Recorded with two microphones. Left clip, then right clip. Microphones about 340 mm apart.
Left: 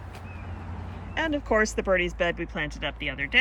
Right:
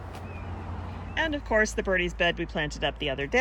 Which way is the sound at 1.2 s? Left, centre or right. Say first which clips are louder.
Left 1 dB; centre.